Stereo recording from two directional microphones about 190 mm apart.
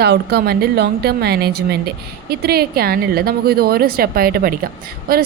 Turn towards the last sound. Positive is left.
turn(degrees=-50)  # may be behind; listen again after turning